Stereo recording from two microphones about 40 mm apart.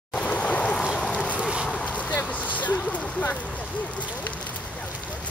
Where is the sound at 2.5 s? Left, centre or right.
Left.